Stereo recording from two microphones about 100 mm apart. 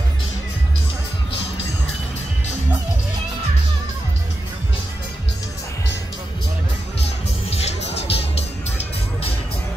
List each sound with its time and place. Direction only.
7.4 s music: 90° left